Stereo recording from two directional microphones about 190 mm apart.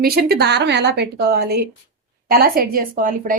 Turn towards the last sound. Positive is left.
turn(degrees=-45)  # may be behind; listen again after turning